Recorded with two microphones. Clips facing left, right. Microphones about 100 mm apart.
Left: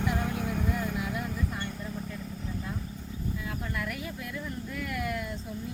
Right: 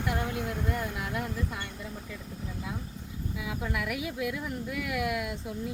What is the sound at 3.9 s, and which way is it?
Speech, 5° right (ahead or behind).